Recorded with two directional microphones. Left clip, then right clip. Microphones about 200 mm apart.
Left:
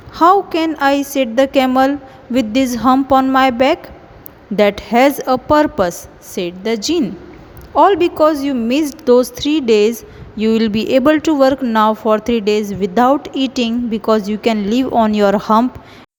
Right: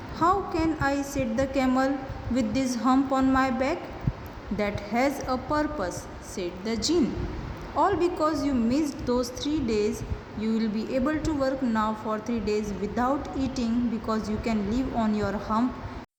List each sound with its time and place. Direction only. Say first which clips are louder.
0.2 s speech: left 13 dB; 45° left (ahead or behind)